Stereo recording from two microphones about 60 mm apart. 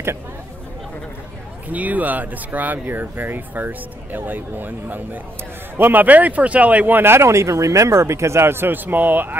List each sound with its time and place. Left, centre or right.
1.7 s speech: right
7.0 s speech: right